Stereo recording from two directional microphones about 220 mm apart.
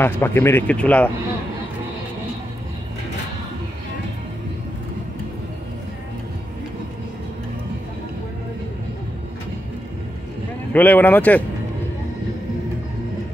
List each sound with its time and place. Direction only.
0.0 s speech: 10° left (ahead or behind)
10.7 s speech: 10° left (ahead or behind)